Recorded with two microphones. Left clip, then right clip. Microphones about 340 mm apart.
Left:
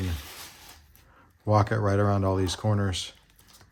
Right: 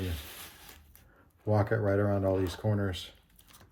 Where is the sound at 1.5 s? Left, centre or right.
Centre.